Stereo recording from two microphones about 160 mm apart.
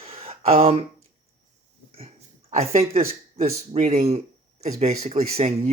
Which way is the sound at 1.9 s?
35° right (ahead or behind).